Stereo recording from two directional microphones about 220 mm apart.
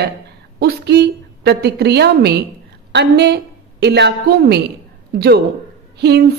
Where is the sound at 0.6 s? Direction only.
50° right (ahead or behind).